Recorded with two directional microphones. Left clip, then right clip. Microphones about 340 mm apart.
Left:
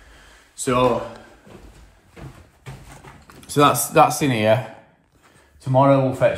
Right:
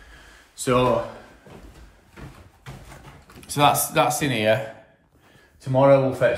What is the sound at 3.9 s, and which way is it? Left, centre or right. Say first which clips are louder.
Mantra: left 5 dB; centre.